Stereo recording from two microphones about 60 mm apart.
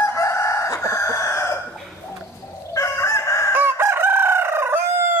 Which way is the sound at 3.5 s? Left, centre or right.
Right.